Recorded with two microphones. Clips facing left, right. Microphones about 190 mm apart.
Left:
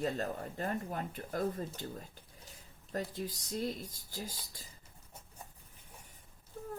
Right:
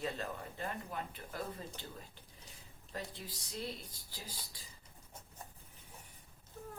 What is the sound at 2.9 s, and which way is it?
Speech, 45° left (ahead or behind).